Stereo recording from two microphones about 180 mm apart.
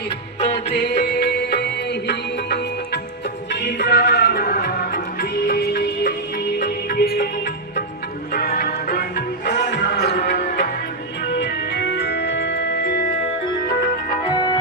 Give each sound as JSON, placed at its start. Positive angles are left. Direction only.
{"t": 0.3, "sound": "music", "side_deg": 35}
{"t": 0.7, "sound": "music", "side_deg": 70}
{"t": 8.3, "sound": "music", "side_deg": 55}
{"t": 11.3, "sound": "music", "side_deg": 70}
{"t": 14.3, "sound": "music", "side_deg": 25}